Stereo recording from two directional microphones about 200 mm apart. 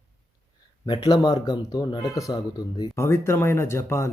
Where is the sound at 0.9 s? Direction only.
20° left (ahead or behind).